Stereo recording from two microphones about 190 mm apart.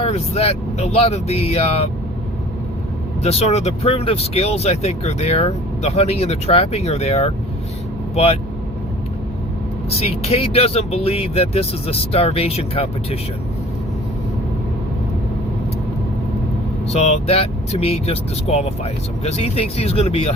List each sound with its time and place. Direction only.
0.0 s speech: 30° left (ahead or behind)
3.2 s speech: 35° left (ahead or behind)
10.2 s speech: 30° left (ahead or behind)
16.9 s speech: 35° left (ahead or behind)